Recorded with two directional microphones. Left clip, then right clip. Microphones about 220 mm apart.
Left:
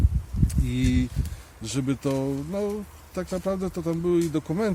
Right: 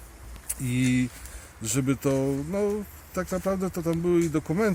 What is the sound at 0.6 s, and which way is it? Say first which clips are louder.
Speech: right 2 dB; 25° right (ahead or behind).